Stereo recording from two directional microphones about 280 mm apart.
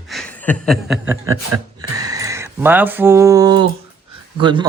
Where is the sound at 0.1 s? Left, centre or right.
Centre.